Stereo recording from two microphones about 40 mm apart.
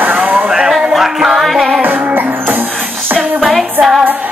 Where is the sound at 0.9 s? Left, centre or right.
Centre.